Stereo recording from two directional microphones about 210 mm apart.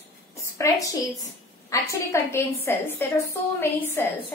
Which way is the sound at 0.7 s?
15° left (ahead or behind).